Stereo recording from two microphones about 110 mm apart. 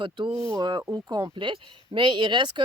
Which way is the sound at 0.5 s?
40° right (ahead or behind).